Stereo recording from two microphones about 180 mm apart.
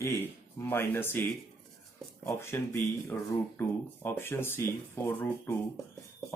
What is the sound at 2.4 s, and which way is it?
Speech, 15° left (ahead or behind).